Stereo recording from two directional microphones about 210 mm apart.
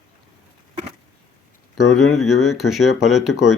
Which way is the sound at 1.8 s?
90° left.